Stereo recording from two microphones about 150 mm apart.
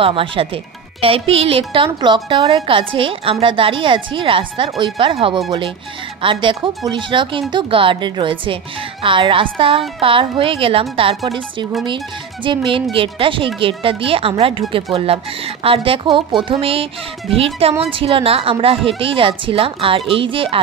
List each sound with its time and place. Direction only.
0.0 s a woman's voice: 35° right (ahead or behind)